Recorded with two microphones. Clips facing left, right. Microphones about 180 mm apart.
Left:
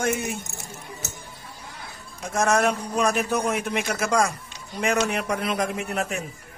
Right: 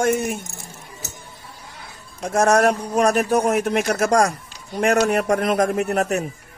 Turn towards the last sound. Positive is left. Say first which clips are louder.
# right 8 dB
turn(degrees=-45)  # may be behind; listen again after turning